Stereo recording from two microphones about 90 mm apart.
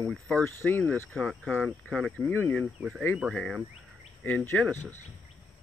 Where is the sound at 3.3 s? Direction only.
10° left (ahead or behind).